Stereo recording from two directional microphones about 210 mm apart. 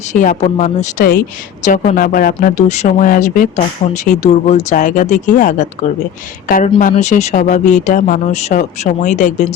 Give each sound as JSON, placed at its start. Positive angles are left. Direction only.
{"t": 0.1, "sound": "speech", "side_deg": 35}